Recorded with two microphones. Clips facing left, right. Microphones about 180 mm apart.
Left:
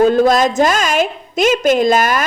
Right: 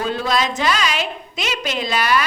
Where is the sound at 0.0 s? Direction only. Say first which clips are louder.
Left 10 dB; 45° left (ahead or behind).